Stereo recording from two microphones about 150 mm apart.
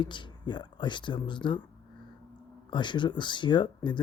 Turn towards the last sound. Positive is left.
turn(degrees=30)  # may be behind; listen again after turning